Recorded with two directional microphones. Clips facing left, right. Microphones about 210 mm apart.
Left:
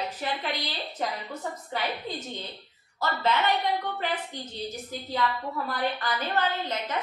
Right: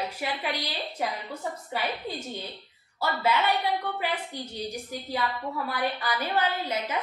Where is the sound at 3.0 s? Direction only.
10° right (ahead or behind).